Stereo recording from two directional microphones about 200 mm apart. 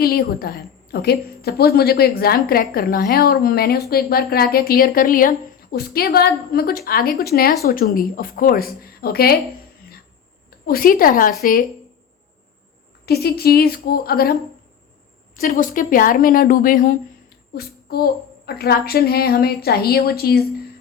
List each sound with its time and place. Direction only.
0.0 s a woman's voice: 50° left (ahead or behind)
10.7 s a woman's voice: 45° left (ahead or behind)
13.1 s a woman's voice: 50° left (ahead or behind)
15.4 s a woman's voice: 45° left (ahead or behind)